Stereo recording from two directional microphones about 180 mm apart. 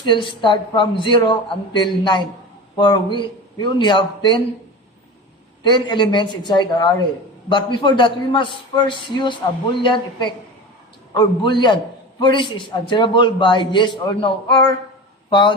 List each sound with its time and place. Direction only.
0.0 s a man's voice: 25° left (ahead or behind)
5.6 s a man's voice: 25° left (ahead or behind)